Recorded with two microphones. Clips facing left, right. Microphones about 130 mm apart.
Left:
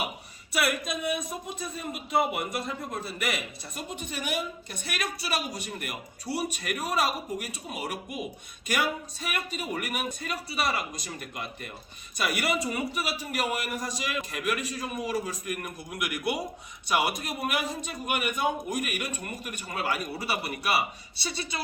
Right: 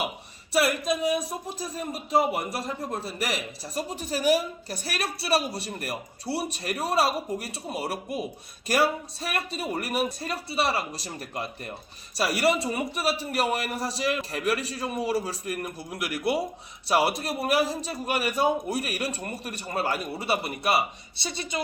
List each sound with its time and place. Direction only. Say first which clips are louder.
0.5 s speech: right 5 dB; 30° right (ahead or behind)